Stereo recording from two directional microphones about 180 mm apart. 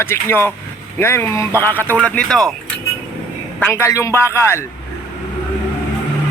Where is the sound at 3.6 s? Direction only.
10° left (ahead or behind).